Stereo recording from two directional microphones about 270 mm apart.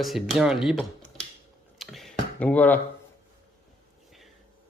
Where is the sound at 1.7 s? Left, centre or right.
Centre.